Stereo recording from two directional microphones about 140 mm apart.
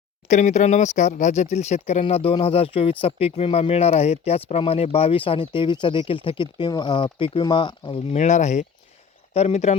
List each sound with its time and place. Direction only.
0.3 s speech: 60° left (ahead or behind); by 8.0 s 35° left (ahead or behind)
8.1 s speech: 55° left (ahead or behind)